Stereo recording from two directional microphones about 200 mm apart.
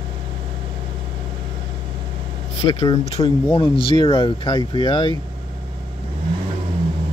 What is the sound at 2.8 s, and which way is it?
Speech, 30° left (ahead or behind).